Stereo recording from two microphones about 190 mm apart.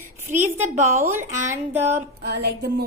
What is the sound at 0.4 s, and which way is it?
Speech, 10° right (ahead or behind).